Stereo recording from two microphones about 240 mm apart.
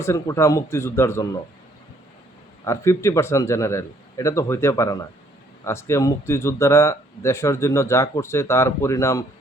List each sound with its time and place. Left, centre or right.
0.0 s speech: centre
2.6 s speech: centre